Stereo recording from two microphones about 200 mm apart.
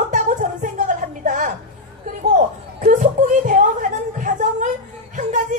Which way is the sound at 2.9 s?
40° right (ahead or behind).